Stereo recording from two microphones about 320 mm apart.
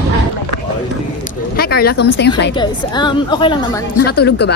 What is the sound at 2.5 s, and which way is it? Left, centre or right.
A woman's voice, centre.